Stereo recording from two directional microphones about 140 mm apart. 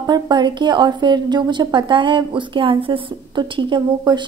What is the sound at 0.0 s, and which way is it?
A woman's voice, 30° right (ahead or behind).